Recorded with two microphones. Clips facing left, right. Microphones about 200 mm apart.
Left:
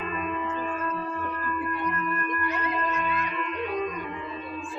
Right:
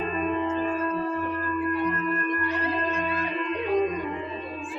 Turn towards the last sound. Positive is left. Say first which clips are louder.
# right 5 dB
turn(degrees=-30)  # may be behind; listen again after turning